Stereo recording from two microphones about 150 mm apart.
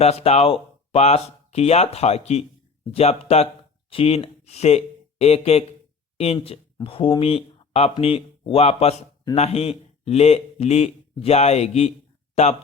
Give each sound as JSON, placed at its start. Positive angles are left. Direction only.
{"t": 0.0, "sound": "speech", "side_deg": 45}